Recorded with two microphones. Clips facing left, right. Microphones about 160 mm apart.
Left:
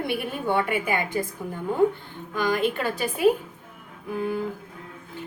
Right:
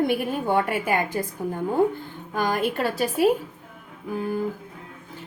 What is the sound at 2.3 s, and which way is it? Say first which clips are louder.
Speech: even; 45° right (ahead or behind).